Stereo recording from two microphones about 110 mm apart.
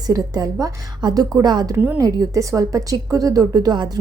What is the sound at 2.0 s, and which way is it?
A woman's voice, 30° right (ahead or behind).